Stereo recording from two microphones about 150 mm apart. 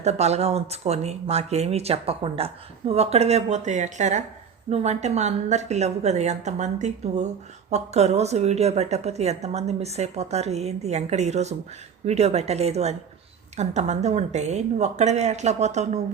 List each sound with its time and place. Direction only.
0.0 s a woman's voice: 45° right (ahead or behind)